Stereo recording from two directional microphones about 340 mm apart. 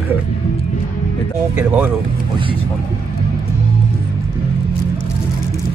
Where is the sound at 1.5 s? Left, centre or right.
Centre.